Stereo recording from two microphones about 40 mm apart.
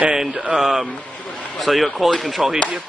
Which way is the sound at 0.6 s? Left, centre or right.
Centre.